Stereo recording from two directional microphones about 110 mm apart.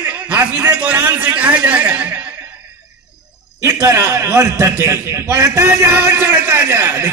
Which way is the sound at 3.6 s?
25° right (ahead or behind).